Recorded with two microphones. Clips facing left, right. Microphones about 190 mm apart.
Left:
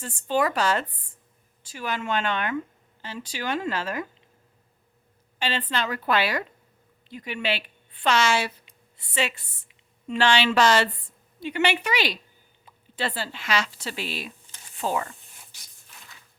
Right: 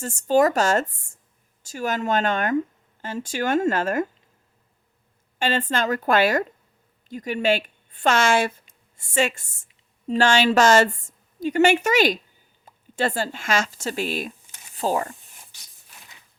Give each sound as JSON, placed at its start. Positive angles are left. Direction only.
{"t": 0.0, "sound": "speech", "side_deg": -45}
{"t": 5.4, "sound": "speech", "side_deg": -45}